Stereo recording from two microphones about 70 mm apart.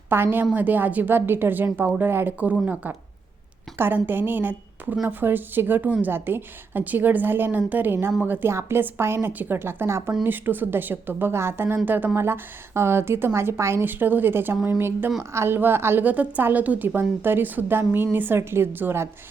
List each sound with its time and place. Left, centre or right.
0.1 s a woman's voice: right
3.8 s a woman's voice: right
12.1 s a woman's voice: right
13.8 s a woman's voice: right
15.2 s a woman's voice: right
16.0 s a woman's voice: right